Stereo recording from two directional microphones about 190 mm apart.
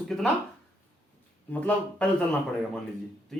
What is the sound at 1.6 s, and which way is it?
Speech, 5° left (ahead or behind).